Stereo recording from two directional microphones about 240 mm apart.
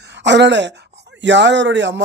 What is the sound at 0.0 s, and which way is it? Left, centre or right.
Speech, right.